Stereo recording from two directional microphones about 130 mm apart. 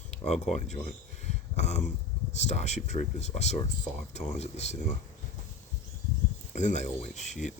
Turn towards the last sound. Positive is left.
turn(degrees=60)  # may be behind; listen again after turning